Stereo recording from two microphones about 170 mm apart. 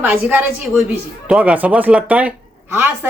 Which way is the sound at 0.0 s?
10° right (ahead or behind).